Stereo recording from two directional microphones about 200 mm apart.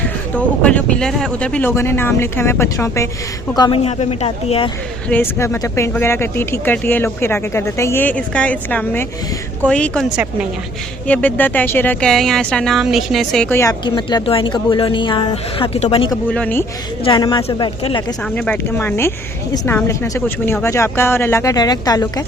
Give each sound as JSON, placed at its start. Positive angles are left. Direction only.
{"t": 0.0, "sound": "speech", "side_deg": 5}
{"t": 3.8, "sound": "a woman's voice", "side_deg": 30}
{"t": 5.0, "sound": "a woman's voice", "side_deg": 10}
{"t": 16.3, "sound": "speech", "side_deg": 5}
{"t": 17.0, "sound": "speech", "side_deg": 25}
{"t": 18.3, "sound": "speech", "side_deg": 10}